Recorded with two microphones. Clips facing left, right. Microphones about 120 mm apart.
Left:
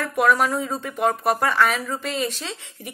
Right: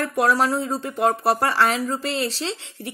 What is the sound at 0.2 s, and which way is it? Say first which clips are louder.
A woman's voice: left 1 dB; 30° right (ahead or behind).